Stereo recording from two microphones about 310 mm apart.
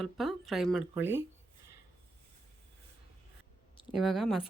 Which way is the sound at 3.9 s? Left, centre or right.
Centre.